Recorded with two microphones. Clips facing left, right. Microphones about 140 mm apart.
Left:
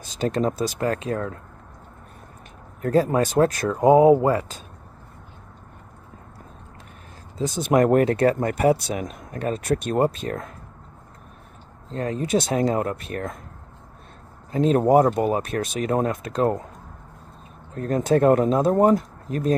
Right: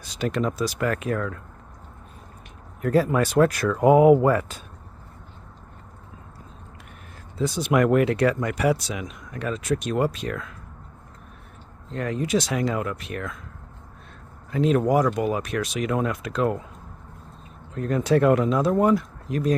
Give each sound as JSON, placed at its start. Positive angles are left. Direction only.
{"t": 0.2, "sound": "speech", "side_deg": 35}
{"t": 2.8, "sound": "speech", "side_deg": 35}
{"t": 7.5, "sound": "speech", "side_deg": 45}
{"t": 9.6, "sound": "speech", "side_deg": 60}
{"t": 9.9, "sound": "speech", "side_deg": 40}
{"t": 11.9, "sound": "speech", "side_deg": 30}
{"t": 12.3, "sound": "speech", "side_deg": 50}
{"t": 12.5, "sound": "speech", "side_deg": 40}
{"t": 14.5, "sound": "speech", "side_deg": 35}
{"t": 17.7, "sound": "speech", "side_deg": 40}